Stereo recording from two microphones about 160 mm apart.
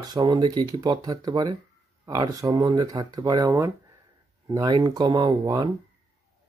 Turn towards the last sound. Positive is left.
turn(degrees=-25)  # may be behind; listen again after turning